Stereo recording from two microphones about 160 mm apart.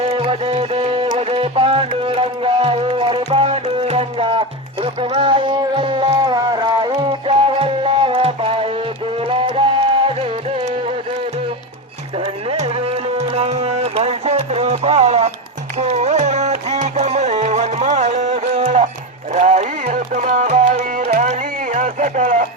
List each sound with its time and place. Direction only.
0.1 s music: 35° right (ahead or behind)
12.2 s music: 40° right (ahead or behind)
21.2 s a sound: 45° right (ahead or behind)